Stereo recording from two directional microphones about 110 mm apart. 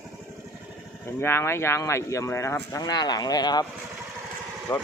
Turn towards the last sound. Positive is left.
turn(degrees=20)  # may be behind; listen again after turning